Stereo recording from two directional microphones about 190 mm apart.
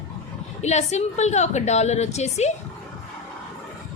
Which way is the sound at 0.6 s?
35° left (ahead or behind).